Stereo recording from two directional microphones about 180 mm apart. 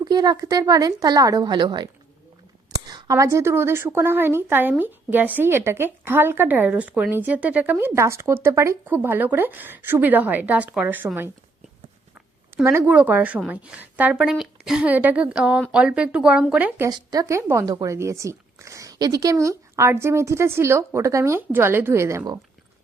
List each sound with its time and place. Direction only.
0.0 s a woman's voice: 20° right (ahead or behind)
12.6 s a woman's voice: 10° right (ahead or behind)